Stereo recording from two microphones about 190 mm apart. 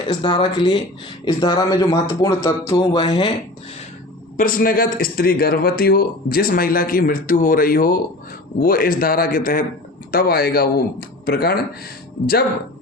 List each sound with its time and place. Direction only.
0.1 s speech: 25° left (ahead or behind)
4.4 s a man's voice: 45° left (ahead or behind)